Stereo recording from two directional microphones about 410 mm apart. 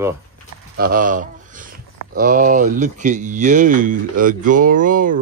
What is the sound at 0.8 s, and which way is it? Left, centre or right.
Speech, centre.